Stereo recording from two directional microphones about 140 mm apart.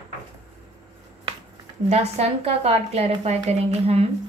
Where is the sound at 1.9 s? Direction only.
50° right (ahead or behind).